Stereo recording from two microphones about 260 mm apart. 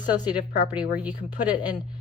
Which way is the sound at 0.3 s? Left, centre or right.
Centre.